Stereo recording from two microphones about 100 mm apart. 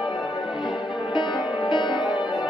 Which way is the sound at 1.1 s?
50° left (ahead or behind).